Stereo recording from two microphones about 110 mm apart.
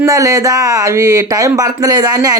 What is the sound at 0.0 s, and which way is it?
Speech, 30° right (ahead or behind).